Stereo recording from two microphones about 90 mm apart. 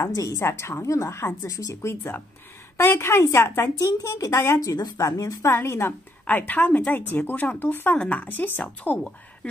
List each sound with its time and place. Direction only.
0.0 s a woman's voice: 40° left (ahead or behind); by 9.5 s 15° left (ahead or behind)